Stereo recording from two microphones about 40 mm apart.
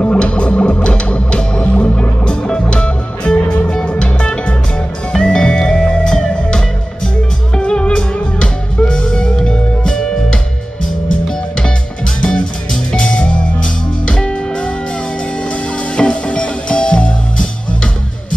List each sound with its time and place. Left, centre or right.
0.0 s music: left
12.2 s music: left
16.0 s music: left